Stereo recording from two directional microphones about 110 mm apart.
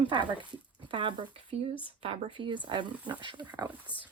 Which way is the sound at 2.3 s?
45° right (ahead or behind).